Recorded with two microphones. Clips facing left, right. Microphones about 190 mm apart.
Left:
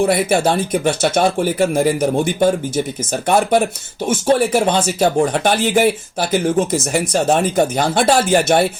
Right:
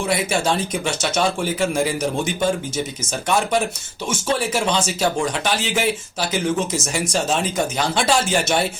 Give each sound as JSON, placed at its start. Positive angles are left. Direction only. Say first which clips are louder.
{"t": 0.0, "sound": "speech", "louder": "left 6 dB", "side_deg": 55}